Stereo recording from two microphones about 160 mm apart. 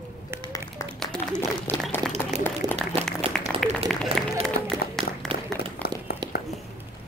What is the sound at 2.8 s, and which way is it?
Applause, 5° right (ahead or behind).